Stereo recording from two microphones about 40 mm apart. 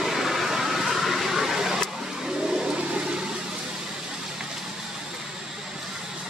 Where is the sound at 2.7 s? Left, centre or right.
Right.